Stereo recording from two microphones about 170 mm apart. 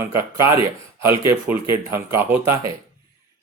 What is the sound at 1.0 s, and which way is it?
Speech, 15° right (ahead or behind).